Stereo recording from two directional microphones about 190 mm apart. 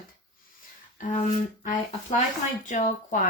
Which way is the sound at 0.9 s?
40° left (ahead or behind).